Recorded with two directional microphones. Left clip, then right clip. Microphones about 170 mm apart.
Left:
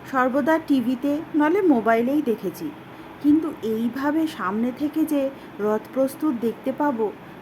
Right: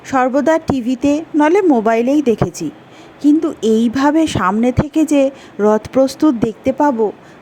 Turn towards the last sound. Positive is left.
turn(degrees=-45)  # may be behind; listen again after turning